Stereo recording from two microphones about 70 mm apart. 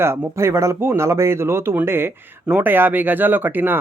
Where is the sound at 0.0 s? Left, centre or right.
Right.